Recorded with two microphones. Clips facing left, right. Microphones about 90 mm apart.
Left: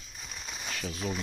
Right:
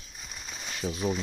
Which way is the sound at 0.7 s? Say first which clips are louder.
Right 5 dB; 20° right (ahead or behind).